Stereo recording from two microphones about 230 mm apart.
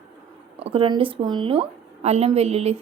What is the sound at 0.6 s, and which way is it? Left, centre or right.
A woman's voice, right.